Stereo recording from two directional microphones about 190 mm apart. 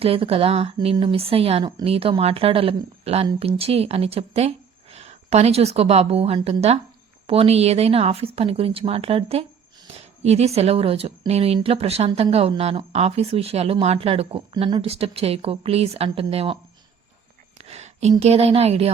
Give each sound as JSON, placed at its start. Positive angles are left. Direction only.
{"t": 0.0, "sound": "a woman's voice", "side_deg": -30}
{"t": 17.6, "sound": "a sound", "side_deg": -35}
{"t": 18.2, "sound": "a woman's voice", "side_deg": -35}